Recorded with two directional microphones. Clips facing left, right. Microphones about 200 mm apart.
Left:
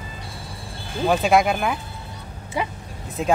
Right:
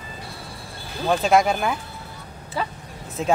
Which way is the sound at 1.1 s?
Centre (ahead or behind).